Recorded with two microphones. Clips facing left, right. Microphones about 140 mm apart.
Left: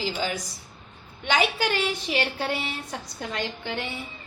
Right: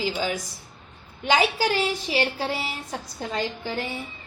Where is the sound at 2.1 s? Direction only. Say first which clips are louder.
Right 1 dB; 30° right (ahead or behind).